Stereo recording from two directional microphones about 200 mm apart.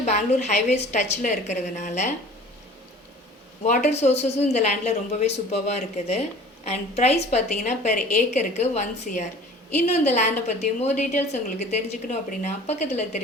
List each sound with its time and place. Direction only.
0.0 s a woman's voice: 35° left (ahead or behind)
3.6 s a woman's voice: 35° left (ahead or behind)